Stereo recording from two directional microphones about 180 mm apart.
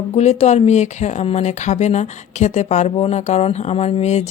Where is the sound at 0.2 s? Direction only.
40° left (ahead or behind).